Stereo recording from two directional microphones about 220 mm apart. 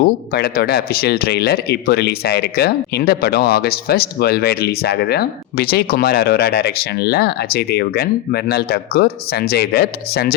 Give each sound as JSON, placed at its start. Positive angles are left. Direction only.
{"t": 0.0, "sound": "speech", "side_deg": 45}